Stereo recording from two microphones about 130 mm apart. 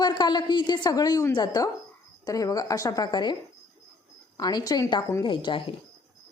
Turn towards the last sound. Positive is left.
turn(degrees=40)  # may be behind; listen again after turning